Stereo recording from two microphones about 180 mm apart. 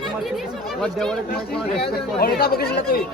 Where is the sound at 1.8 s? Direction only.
60° left (ahead or behind).